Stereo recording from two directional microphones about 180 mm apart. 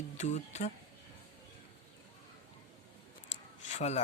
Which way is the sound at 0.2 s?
40° left (ahead or behind).